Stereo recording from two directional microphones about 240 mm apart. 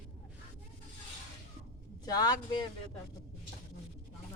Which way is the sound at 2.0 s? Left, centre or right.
Centre.